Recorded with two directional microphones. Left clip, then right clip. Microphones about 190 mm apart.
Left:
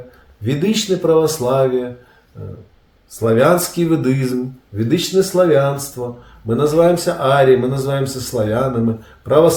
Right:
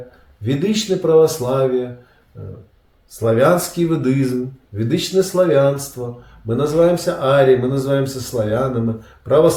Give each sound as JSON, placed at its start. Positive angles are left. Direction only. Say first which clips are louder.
{"t": 0.4, "sound": "speech", "louder": "left 1 dB", "side_deg": 20}
{"t": 3.1, "sound": "speech", "louder": "left 1 dB", "side_deg": 20}